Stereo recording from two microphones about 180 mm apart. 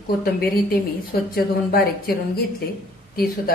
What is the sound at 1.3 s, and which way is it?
A woman's voice, 55° left (ahead or behind).